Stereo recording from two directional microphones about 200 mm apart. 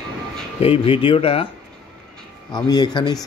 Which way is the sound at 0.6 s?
30° left (ahead or behind).